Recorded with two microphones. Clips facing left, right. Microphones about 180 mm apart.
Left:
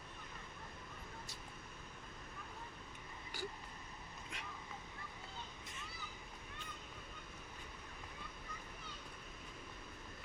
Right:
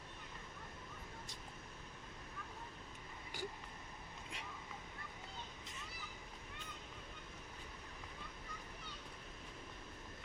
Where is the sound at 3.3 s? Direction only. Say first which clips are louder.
Even; 20° right (ahead or behind).